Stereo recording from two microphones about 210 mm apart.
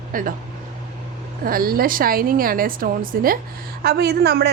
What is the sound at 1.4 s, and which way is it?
A woman's voice, 45° right (ahead or behind).